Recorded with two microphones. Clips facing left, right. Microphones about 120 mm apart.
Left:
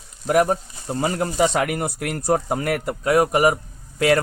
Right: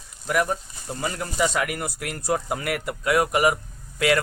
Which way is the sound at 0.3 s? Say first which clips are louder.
Left 6 dB; 40° left (ahead or behind).